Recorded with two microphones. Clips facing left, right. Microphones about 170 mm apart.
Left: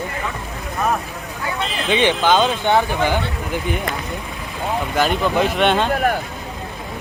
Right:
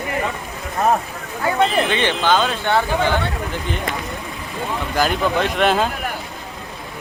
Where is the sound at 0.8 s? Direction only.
35° right (ahead or behind).